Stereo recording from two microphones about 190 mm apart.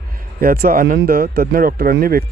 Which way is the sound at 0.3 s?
50° right (ahead or behind).